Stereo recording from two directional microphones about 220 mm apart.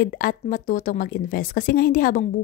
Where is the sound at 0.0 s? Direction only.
40° left (ahead or behind).